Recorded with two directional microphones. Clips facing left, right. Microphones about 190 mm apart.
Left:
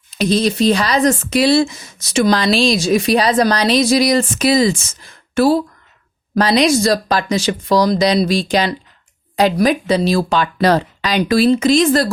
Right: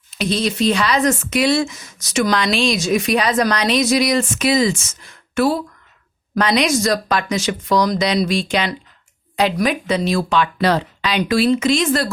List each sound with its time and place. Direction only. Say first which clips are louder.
0.2 s speech: left 4 dB; 40° left (ahead or behind)